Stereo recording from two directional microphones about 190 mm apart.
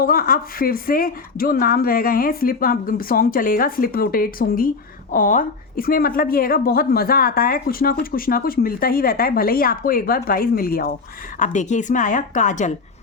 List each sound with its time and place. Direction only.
0.0 s a woman's voice: 50° left (ahead or behind)
11.3 s a woman's voice: 40° left (ahead or behind)